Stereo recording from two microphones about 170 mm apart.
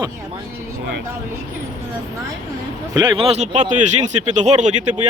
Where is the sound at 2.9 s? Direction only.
25° right (ahead or behind).